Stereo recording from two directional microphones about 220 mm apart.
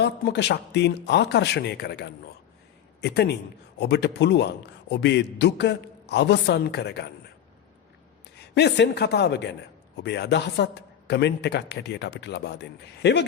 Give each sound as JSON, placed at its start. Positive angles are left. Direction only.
{"t": 0.0, "sound": "a man's voice", "side_deg": 50}
{"t": 8.5, "sound": "a man's voice", "side_deg": 50}